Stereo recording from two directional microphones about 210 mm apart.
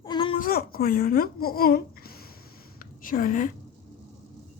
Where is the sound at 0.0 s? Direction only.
25° left (ahead or behind).